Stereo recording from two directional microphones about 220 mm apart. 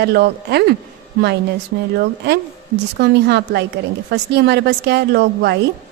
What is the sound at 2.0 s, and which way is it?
A woman's voice, 50° right (ahead or behind).